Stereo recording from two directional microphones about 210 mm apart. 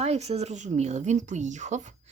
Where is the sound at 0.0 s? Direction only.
30° right (ahead or behind).